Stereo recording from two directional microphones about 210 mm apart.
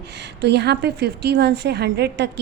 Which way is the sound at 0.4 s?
55° right (ahead or behind).